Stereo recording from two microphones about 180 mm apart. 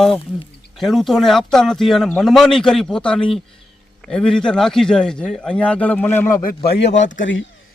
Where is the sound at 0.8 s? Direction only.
Centre (ahead or behind).